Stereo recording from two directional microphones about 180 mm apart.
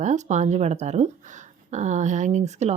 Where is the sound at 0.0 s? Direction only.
40° right (ahead or behind).